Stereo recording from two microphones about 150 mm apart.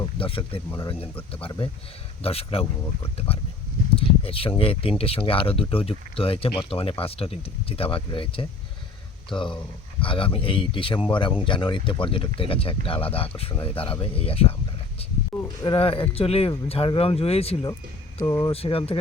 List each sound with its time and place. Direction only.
0.0 s speech: 35° left (ahead or behind)
18.2 s speech: 25° left (ahead or behind)
18.5 s speech: 40° left (ahead or behind)